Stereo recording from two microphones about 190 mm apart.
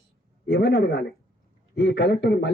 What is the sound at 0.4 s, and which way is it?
Speech, 55° left (ahead or behind).